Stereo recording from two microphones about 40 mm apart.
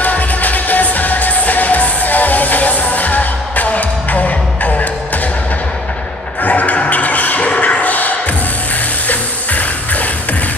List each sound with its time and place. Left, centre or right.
0.0 s music: left
6.4 s a sound: left
9.0 s music: left